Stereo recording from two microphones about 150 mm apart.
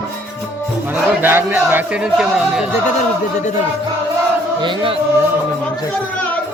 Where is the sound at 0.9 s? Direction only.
15° right (ahead or behind).